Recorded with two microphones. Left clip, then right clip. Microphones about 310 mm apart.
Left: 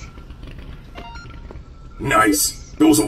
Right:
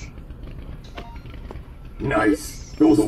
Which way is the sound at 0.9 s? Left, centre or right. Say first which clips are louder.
Left 4 dB; centre.